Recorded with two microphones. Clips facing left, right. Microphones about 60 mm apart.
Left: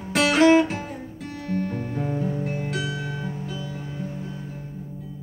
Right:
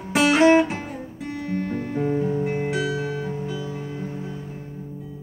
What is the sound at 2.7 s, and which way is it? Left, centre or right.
Music, right.